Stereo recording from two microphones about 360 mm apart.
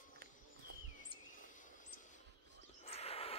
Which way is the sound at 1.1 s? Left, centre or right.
Left.